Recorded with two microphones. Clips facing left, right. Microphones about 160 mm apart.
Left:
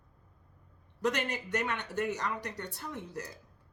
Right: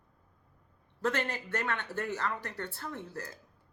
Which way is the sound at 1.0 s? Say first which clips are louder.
Even; 15° left (ahead or behind).